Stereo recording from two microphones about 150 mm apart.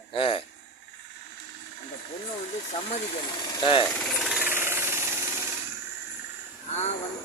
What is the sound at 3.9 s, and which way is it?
Speech, 10° left (ahead or behind).